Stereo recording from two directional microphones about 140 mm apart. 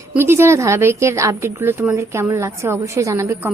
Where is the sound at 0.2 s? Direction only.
20° right (ahead or behind).